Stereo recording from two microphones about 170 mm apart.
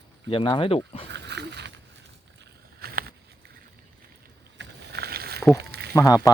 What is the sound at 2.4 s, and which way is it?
Boat, 60° right (ahead or behind).